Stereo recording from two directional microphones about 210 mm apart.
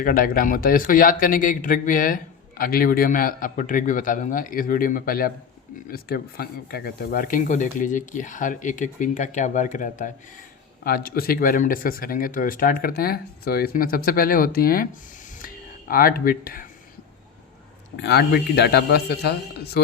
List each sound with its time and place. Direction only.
0.0 s a man's voice: 40° left (ahead or behind)
15.9 s speech: 45° left (ahead or behind)
18.0 s speech: 50° left (ahead or behind)